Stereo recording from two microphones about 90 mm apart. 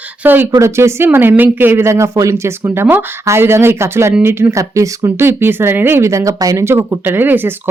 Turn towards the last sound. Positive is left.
turn(degrees=-20)  # may be behind; listen again after turning